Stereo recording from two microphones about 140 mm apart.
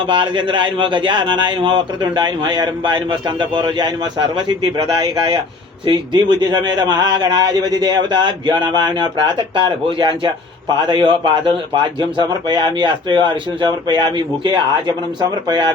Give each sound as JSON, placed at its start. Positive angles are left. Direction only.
{"t": 0.1, "sound": "speech", "side_deg": -35}
{"t": 5.8, "sound": "speech", "side_deg": -35}
{"t": 12.5, "sound": "speech", "side_deg": -35}